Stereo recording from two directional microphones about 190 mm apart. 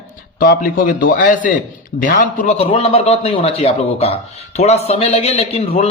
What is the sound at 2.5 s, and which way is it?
Speech, 30° left (ahead or behind).